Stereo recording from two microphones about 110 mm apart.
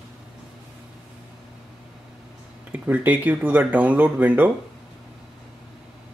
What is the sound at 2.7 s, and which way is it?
Speech, 15° right (ahead or behind).